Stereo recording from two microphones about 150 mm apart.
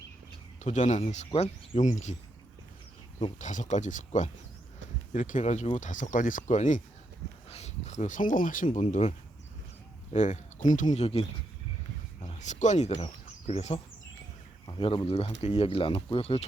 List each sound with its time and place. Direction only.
0.6 s speech: 55° left (ahead or behind)
3.3 s speech: 55° left (ahead or behind)
8.8 s speech: 50° left (ahead or behind)
11.0 s speech: 40° left (ahead or behind)
12.3 s speech: 50° left (ahead or behind)
14.7 s speech: 35° left (ahead or behind)